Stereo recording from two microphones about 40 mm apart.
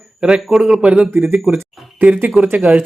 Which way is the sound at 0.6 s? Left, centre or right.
Right.